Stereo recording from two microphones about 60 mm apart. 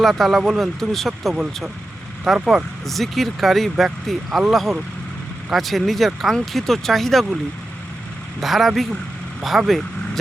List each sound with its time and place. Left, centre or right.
0.0 s speech: centre
8.4 s speech: centre